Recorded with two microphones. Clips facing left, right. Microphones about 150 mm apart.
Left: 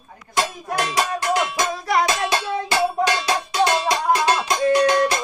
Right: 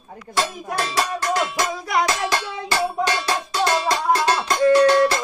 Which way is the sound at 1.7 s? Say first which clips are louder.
Left 2 dB; centre (ahead or behind).